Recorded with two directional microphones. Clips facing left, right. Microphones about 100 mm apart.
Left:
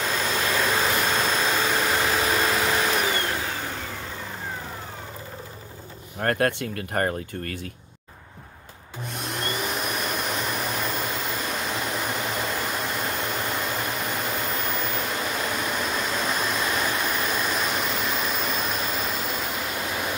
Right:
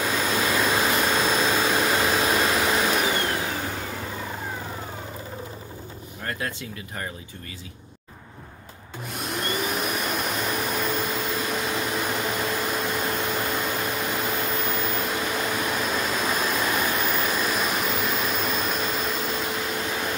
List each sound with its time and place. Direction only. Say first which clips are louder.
0.0 s vehicle: right 2 dB; 5° right (ahead or behind)
6.2 s speech: left 8 dB; 60° left (ahead or behind)
9.2 s vacuum cleaner: right 2 dB; centre (ahead or behind)